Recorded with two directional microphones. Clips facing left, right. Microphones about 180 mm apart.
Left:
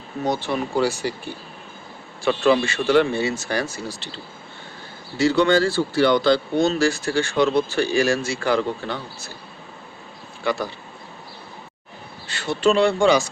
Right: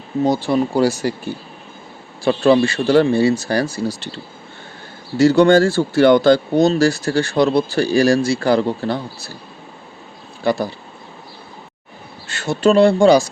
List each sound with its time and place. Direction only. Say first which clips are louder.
0.4 s speech: right 6 dB; 35° right (ahead or behind)
2.2 s speech: right 5 dB; 35° right (ahead or behind)
5.1 s speech: right 6 dB; 45° right (ahead or behind)
10.4 s speech: right 5 dB; 35° right (ahead or behind)
12.3 s speech: right 4 dB; 45° right (ahead or behind)